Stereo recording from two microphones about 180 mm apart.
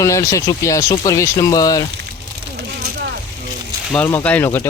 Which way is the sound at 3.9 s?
10° left (ahead or behind).